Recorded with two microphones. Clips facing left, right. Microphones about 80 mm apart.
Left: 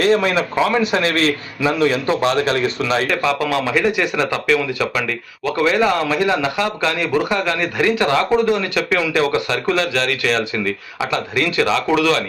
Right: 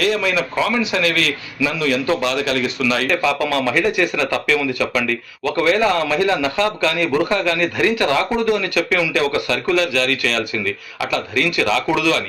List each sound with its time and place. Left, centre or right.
0.0 s a man's voice: left
3.2 s a man's voice: left